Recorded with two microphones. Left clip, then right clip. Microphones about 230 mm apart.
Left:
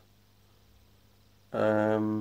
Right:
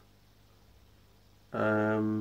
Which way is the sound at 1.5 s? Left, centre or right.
Centre.